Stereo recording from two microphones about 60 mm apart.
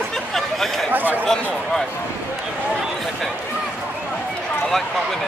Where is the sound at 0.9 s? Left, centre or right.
Right.